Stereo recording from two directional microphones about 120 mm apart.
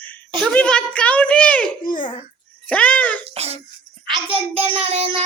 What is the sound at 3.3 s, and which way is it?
Music, 60° right (ahead or behind).